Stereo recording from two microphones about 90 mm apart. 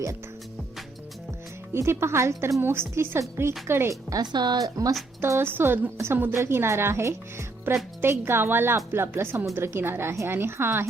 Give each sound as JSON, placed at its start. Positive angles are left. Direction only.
{"t": 1.7, "sound": "a woman's voice", "side_deg": -30}
{"t": 4.1, "sound": "speech", "side_deg": -50}
{"t": 5.2, "sound": "a woman's voice", "side_deg": -25}